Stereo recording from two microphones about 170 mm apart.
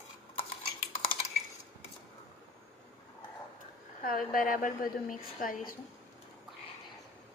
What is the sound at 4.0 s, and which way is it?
A woman's voice, 55° left (ahead or behind).